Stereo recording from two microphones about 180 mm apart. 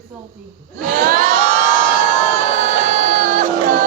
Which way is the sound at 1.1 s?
50° right (ahead or behind).